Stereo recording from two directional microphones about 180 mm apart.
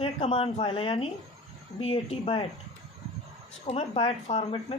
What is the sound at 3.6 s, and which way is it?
Speech, 35° left (ahead or behind).